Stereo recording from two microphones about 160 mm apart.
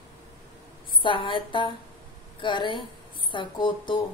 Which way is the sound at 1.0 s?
30° left (ahead or behind).